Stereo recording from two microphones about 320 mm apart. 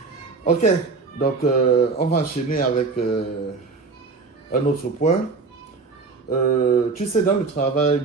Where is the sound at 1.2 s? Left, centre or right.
Left.